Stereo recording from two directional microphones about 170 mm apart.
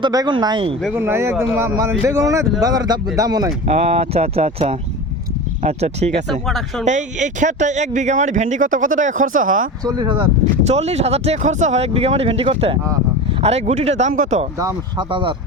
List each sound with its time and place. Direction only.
0.0 s speech: 25° right (ahead or behind)
0.9 s speech: 15° right (ahead or behind)
3.7 s speech: 40° right (ahead or behind)
9.8 s speech: 25° right (ahead or behind)
10.6 s speech: 40° right (ahead or behind)
14.6 s speech: 30° right (ahead or behind)